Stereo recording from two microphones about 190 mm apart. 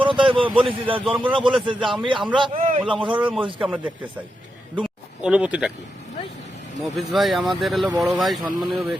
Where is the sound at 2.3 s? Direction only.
25° right (ahead or behind).